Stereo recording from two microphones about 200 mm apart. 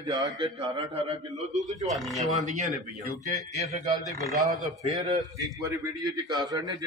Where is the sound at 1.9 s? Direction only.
Centre (ahead or behind).